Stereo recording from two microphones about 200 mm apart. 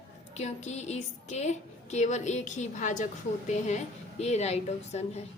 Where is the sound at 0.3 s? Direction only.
35° left (ahead or behind).